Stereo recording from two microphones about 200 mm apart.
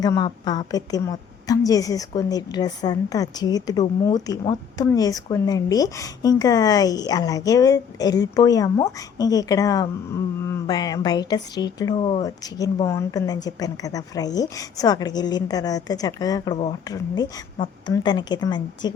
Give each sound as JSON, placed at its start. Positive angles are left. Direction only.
{"t": 0.0, "sound": "a woman's voice", "side_deg": 20}